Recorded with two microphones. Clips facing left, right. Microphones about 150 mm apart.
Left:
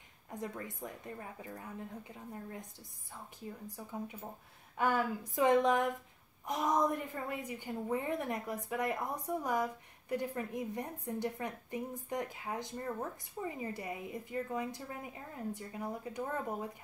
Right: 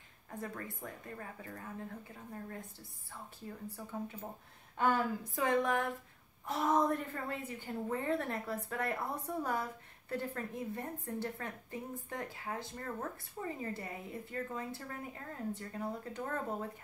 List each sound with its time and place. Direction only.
0.3 s speech: 20° left (ahead or behind)
3.6 s a woman's voice: 15° left (ahead or behind)